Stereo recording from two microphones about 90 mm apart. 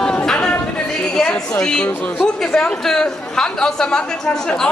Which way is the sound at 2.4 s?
10° left (ahead or behind).